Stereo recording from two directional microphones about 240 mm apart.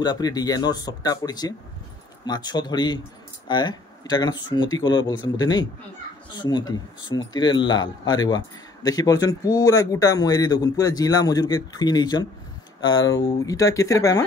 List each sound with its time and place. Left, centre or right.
0.0 s a man's voice: centre